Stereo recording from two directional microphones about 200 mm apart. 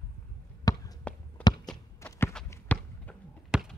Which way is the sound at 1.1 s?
5° left (ahead or behind).